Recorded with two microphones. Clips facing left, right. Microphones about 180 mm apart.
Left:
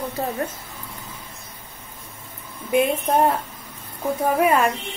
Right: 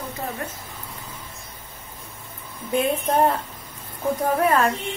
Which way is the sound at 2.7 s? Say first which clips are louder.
Left 2 dB; 10° left (ahead or behind).